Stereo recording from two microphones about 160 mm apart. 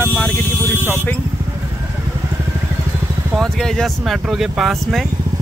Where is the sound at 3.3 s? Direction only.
Centre (ahead or behind).